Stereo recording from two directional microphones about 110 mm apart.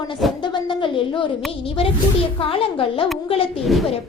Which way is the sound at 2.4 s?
55° left (ahead or behind).